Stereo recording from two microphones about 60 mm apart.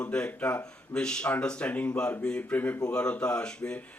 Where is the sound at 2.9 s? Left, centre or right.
Centre.